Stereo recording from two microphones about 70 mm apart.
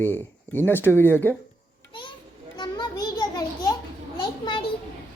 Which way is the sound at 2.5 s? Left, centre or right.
Left.